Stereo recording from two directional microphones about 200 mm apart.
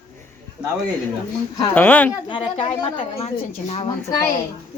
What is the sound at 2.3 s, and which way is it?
A woman's voice, 25° left (ahead or behind).